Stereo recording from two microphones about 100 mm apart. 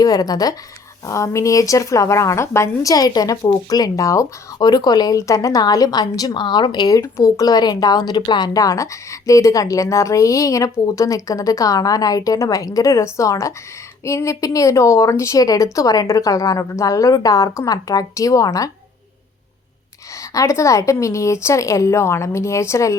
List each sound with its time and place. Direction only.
0.0 s speech: 40° left (ahead or behind)
7.0 s speech: 35° left (ahead or behind)
20.1 s speech: 30° left (ahead or behind)